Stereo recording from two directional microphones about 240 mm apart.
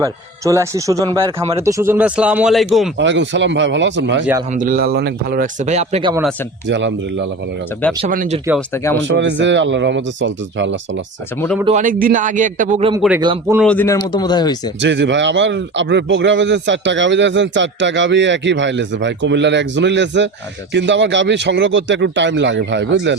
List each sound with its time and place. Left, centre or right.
0.0 s speech: centre
3.0 s a man's voice: right
4.5 s speech: right
6.7 s a man's voice: right
8.0 s speech: right
8.7 s speech: centre
9.0 s a man's voice: right
11.3 s speech: centre
11.6 s speech: right
13.0 s speech: centre
13.2 s speech: centre
13.6 s speech: centre
14.8 s a man's voice: right